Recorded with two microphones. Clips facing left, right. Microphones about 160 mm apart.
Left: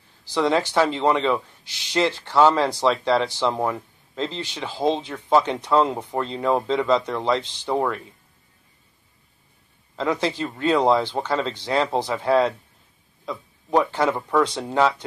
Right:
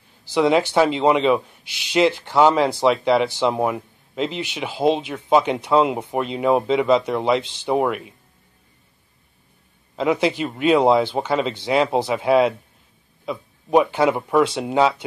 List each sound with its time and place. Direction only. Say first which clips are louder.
0.3 s speech: right 4 dB; 15° right (ahead or behind)
9.9 s speech: right 4 dB; 15° right (ahead or behind)